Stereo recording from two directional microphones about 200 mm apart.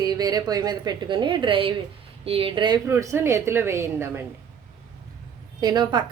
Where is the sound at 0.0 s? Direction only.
20° right (ahead or behind).